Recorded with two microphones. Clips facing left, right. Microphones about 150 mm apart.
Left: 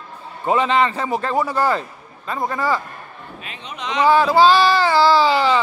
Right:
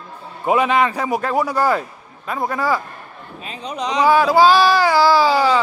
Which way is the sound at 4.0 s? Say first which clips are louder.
Even; 10° right (ahead or behind).